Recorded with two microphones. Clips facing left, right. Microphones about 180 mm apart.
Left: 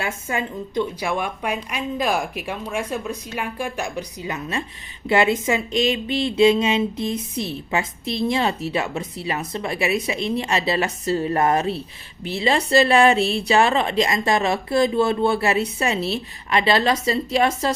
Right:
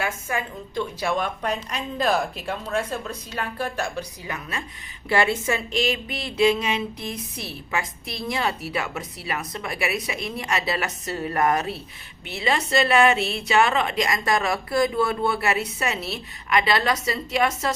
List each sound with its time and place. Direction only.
0.0 s a woman's voice: 25° left (ahead or behind)